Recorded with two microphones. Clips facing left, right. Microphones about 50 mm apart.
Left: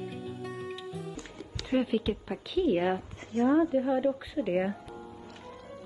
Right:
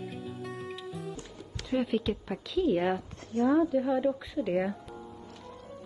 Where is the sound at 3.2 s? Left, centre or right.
Left.